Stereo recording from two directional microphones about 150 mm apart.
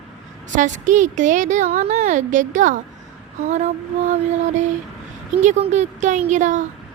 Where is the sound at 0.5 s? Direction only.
55° right (ahead or behind).